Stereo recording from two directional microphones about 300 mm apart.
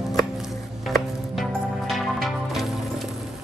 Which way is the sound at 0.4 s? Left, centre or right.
Centre.